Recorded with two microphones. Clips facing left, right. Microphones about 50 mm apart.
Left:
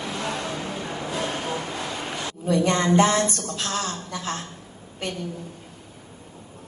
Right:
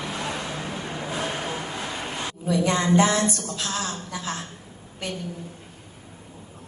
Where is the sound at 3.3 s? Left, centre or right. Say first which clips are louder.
Left 1 dB; left.